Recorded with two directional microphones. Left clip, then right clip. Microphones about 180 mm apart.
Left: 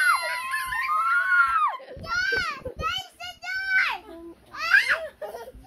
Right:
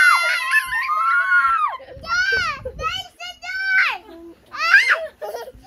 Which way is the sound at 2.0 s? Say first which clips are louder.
Right 6 dB; 40° right (ahead or behind).